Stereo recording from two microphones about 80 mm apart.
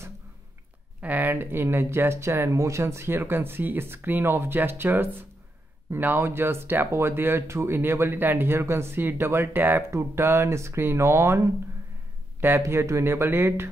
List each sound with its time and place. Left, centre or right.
1.0 s speech: right